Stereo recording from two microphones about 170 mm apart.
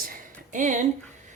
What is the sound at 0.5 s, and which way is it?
Speech, 45° right (ahead or behind).